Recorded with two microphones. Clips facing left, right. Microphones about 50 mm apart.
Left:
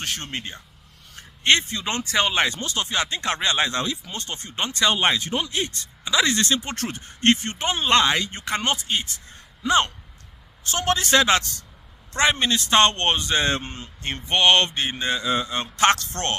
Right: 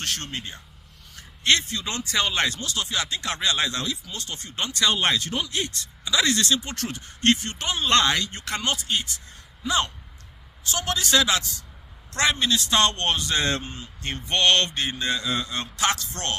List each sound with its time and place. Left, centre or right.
0.0 s speech: left
2.6 s speech: left
7.9 s speech: centre
9.6 s speech: left
12.1 s speech: left
14.3 s speech: centre
15.8 s speech: left